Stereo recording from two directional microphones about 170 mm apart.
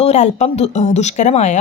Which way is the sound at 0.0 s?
40° left (ahead or behind).